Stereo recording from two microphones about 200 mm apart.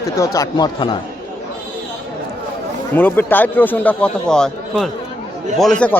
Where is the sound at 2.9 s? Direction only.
10° left (ahead or behind).